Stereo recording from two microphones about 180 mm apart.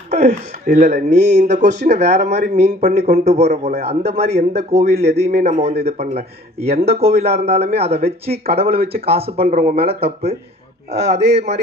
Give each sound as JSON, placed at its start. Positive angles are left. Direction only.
{"t": 0.1, "sound": "speech", "side_deg": -40}
{"t": 11.1, "sound": "speech", "side_deg": -35}